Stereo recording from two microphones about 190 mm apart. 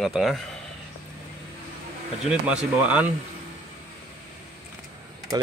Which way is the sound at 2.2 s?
5° right (ahead or behind).